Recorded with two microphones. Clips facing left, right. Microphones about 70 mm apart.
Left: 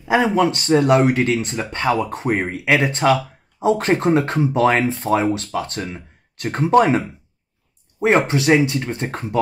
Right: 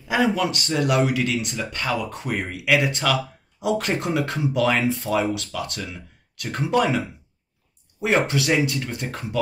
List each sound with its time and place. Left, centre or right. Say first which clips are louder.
0.1 s speech: left 5 dB; left